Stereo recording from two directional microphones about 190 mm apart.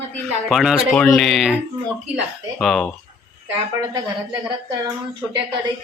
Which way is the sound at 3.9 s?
20° right (ahead or behind).